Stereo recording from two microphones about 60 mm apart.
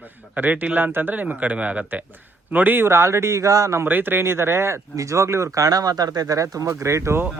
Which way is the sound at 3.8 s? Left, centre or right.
Right.